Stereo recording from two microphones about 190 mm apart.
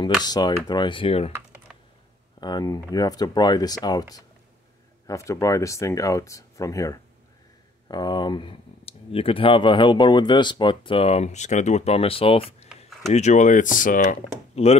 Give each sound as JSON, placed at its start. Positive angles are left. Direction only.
{"t": 0.2, "sound": "speech", "side_deg": 20}
{"t": 2.4, "sound": "speech", "side_deg": 20}
{"t": 12.6, "sound": "a sound", "side_deg": 0}
{"t": 13.1, "sound": "speech", "side_deg": 40}